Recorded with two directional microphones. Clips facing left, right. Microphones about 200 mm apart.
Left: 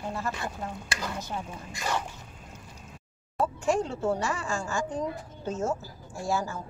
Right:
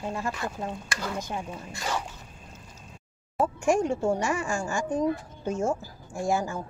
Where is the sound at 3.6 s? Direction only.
15° right (ahead or behind).